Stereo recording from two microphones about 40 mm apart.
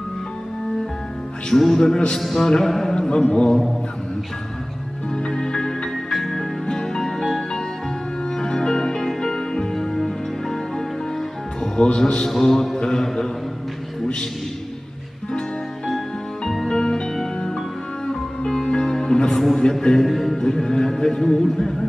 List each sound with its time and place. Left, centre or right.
1.5 s a man's voice: centre; by 3.5 s left
5.1 s music: centre
6.0 s music: centre
6.3 s music: centre
11.6 s music: centre
12.0 s speech: centre
16.6 s music: centre
18.0 s music: centre
19.8 s speech: centre
20.1 s music: centre
20.3 s music: centre
20.6 s speech: centre